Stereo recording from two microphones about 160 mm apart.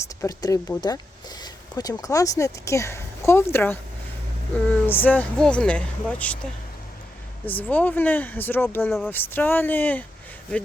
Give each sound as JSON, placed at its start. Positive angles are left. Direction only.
{"t": 0.2, "sound": "speech", "side_deg": 20}